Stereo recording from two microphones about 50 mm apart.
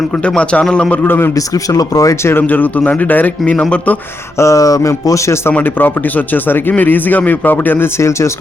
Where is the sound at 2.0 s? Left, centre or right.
Left.